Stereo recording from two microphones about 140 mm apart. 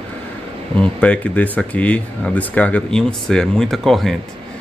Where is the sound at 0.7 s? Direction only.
10° left (ahead or behind).